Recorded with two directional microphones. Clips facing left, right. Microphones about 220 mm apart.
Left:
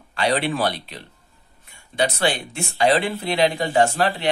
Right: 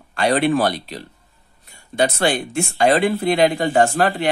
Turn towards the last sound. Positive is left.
turn(degrees=-50)  # may be behind; listen again after turning